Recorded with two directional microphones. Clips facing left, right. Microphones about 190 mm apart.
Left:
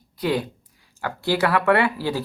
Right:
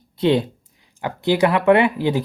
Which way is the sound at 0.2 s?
25° right (ahead or behind).